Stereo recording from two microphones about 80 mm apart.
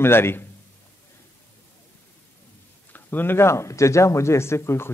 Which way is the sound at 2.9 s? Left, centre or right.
Left.